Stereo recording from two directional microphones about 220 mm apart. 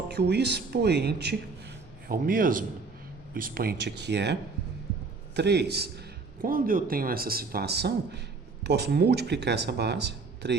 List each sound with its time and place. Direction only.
0.1 s speech: 50° right (ahead or behind)